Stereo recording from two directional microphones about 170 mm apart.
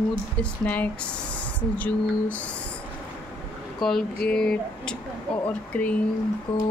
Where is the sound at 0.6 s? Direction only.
10° left (ahead or behind).